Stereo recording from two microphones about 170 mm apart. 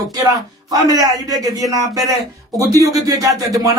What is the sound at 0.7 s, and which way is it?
Speech, 20° right (ahead or behind).